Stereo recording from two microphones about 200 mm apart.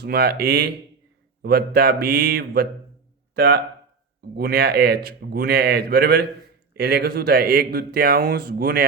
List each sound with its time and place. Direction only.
0.0 s speech: 50° right (ahead or behind)